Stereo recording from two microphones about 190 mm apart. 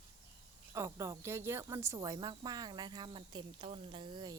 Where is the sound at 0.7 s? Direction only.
15° right (ahead or behind).